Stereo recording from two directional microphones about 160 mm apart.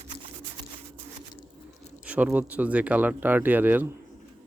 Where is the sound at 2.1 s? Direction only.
10° right (ahead or behind).